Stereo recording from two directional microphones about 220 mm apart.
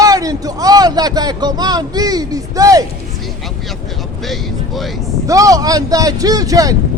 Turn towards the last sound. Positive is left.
turn(degrees=-15)  # may be behind; listen again after turning